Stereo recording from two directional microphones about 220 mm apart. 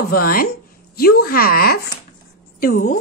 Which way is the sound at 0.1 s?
40° left (ahead or behind).